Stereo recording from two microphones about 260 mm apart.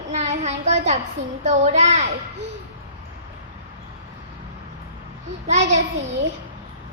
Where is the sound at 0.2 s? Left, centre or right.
Right.